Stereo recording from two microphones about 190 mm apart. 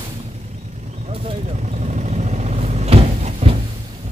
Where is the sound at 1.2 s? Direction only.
40° right (ahead or behind).